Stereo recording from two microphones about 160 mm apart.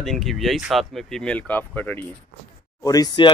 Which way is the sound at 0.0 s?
Centre (ahead or behind).